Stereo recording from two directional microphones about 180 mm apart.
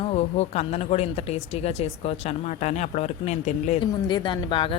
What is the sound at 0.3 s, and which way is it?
Speech, 35° left (ahead or behind).